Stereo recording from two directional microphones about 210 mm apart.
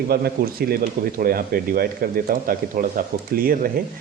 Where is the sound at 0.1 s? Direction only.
45° right (ahead or behind).